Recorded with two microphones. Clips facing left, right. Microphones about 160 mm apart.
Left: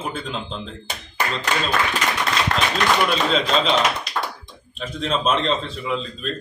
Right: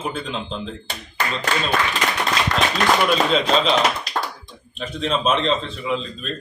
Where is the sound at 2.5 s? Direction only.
50° left (ahead or behind).